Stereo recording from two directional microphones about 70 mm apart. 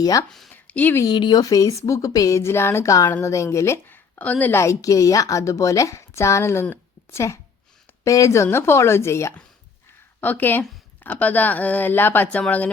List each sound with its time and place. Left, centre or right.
0.0 s a woman's voice: left
0.3 s a woman's voice: centre
0.5 s a sound: left
1.0 s a woman's voice: left
2.4 s a woman's voice: left
3.8 s a sound: left
4.5 s a woman's voice: left
8.4 s speech: left
10.2 s speech: left